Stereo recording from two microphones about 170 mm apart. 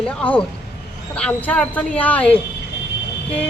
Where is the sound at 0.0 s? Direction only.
5° left (ahead or behind).